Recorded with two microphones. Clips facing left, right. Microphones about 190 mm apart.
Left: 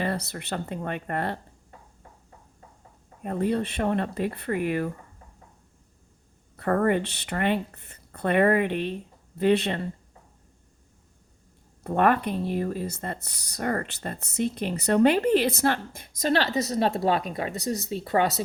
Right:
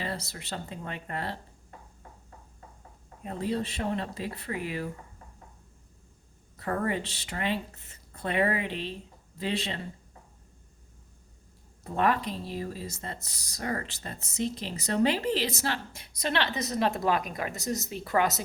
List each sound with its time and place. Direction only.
0.0 s speech: 60° left (ahead or behind)
3.2 s speech: 55° left (ahead or behind)
6.6 s speech: 55° left (ahead or behind)
11.8 s speech: 60° left (ahead or behind); by 18.4 s 30° left (ahead or behind)